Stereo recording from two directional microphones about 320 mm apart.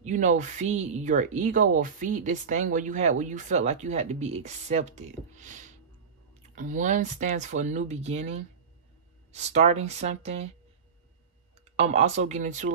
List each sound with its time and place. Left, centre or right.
0.0 s speech: right
9.3 s speech: right
11.7 s speech: centre